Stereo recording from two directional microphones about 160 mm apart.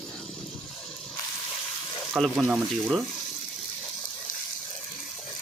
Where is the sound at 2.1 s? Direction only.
5° right (ahead or behind).